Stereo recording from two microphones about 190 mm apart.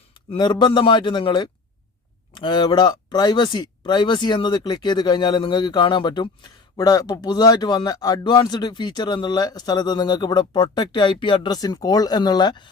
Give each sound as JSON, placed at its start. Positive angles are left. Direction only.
{"t": 0.3, "sound": "speech", "side_deg": 25}